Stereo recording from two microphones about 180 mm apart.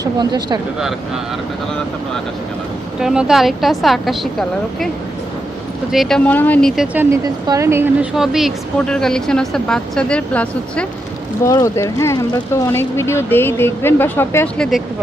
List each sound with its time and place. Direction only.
0.0 s speech: 25° right (ahead or behind)
3.0 s speech: 5° right (ahead or behind)
5.9 s speech: centre (ahead or behind)
6.9 s a woman's voice: 10° right (ahead or behind)
8.1 s speech: centre (ahead or behind)